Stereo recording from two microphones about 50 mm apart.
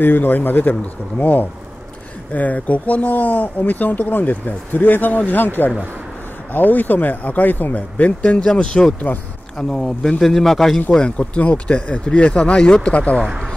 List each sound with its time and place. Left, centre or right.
0.0 s speech: left
6.5 s speech: left; by 8.8 s centre
9.1 s speech: left
9.6 s speech: centre
10.9 s speech: centre